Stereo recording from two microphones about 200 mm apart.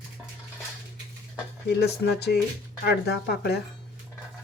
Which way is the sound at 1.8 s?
55° left (ahead or behind).